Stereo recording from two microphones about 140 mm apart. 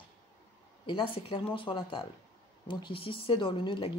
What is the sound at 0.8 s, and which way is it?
Speech, 40° left (ahead or behind).